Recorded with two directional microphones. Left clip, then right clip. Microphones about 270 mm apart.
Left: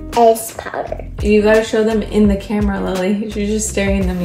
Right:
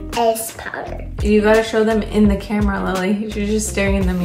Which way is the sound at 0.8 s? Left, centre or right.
Centre.